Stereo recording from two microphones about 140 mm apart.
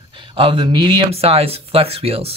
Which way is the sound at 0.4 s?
35° right (ahead or behind).